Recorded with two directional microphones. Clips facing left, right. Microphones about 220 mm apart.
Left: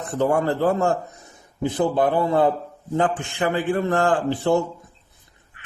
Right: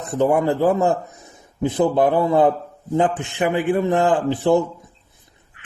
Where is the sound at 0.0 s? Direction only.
20° right (ahead or behind).